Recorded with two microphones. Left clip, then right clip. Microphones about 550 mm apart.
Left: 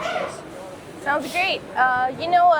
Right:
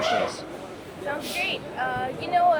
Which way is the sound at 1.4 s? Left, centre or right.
Left.